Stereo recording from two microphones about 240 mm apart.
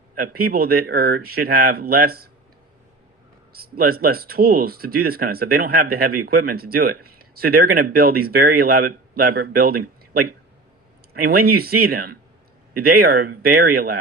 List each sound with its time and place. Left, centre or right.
0.2 s speech: right
3.8 s speech: right